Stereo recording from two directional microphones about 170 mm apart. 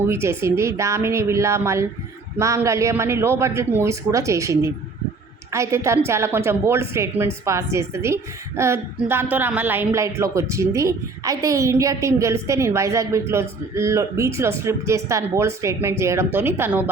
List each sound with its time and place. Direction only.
0.1 s speech: 15° right (ahead or behind)